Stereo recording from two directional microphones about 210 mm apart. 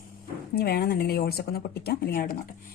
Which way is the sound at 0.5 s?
45° left (ahead or behind).